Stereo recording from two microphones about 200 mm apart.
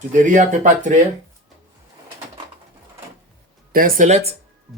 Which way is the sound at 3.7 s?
45° right (ahead or behind).